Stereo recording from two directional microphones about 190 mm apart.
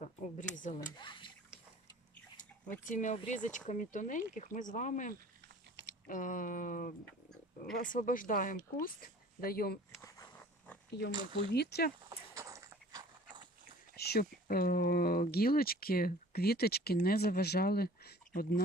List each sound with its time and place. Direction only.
0.0 s speech: 40° left (ahead or behind)
0.8 s speech: 25° left (ahead or behind)
2.8 s speech: 45° left (ahead or behind)
11.5 s speech: 60° left (ahead or behind)
12.0 s dog: 15° right (ahead or behind)
13.9 s speech: 55° left (ahead or behind)